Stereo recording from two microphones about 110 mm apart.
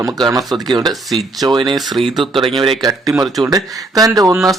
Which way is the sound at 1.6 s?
Centre (ahead or behind).